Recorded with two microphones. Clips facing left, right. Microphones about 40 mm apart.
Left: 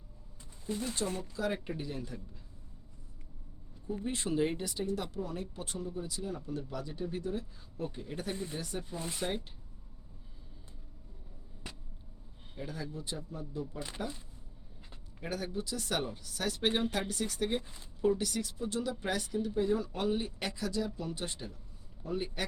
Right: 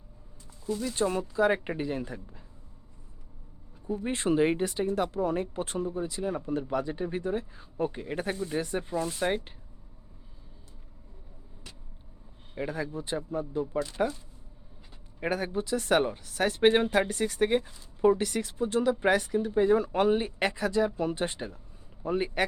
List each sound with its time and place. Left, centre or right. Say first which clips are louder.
0.9 s speech: right 9 dB; right
3.8 s speech: right 7 dB; right
12.6 s speech: right 7 dB; right
13.7 s speech: right 11 dB; centre
15.2 s speech: right 7 dB; right